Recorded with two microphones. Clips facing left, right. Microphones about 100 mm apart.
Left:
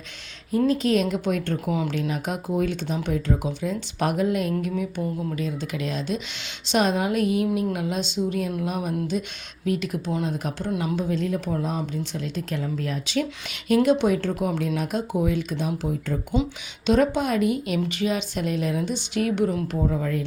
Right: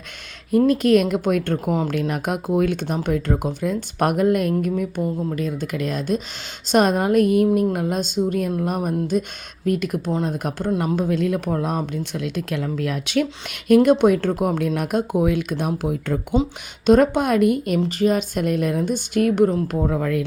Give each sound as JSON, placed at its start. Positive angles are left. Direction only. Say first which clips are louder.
{"t": 0.7, "sound": "a woman's voice", "louder": "right 5 dB", "side_deg": -60}
{"t": 16.3, "sound": "a woman's voice", "louder": "right 3 dB", "side_deg": -40}
{"t": 17.7, "sound": "a woman's voice", "louder": "right 6 dB", "side_deg": -40}
{"t": 19.8, "sound": "speech", "louder": "right 3 dB", "side_deg": -65}